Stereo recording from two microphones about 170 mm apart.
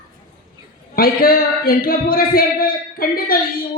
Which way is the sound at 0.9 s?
60° left (ahead or behind).